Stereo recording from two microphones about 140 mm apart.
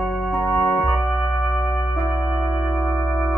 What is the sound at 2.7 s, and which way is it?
Music, 15° left (ahead or behind).